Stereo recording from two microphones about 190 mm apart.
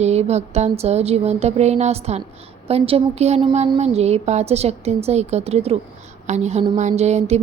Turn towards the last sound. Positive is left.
turn(degrees=-35)  # may be behind; listen again after turning